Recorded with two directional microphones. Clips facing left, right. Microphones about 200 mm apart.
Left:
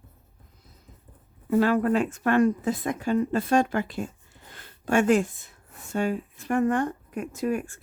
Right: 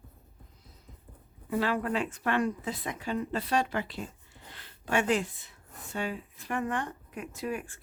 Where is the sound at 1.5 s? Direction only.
45° left (ahead or behind).